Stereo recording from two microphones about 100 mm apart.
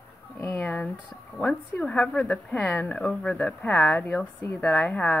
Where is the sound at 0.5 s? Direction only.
15° left (ahead or behind).